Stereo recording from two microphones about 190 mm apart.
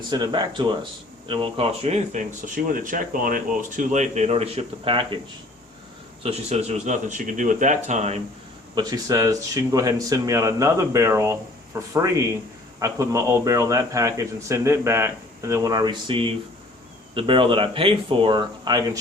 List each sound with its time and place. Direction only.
0.1 s speech: 25° right (ahead or behind)
2.7 s speech: 45° right (ahead or behind); by 5.2 s 25° right (ahead or behind)
6.2 s speech: 35° right (ahead or behind)
8.7 s a man's voice: 20° right (ahead or behind)